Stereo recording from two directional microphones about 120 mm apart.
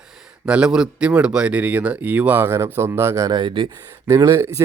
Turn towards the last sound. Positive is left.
turn(degrees=-25)  # may be behind; listen again after turning